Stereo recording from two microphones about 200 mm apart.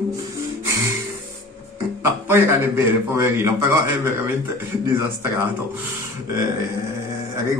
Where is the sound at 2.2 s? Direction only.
10° right (ahead or behind).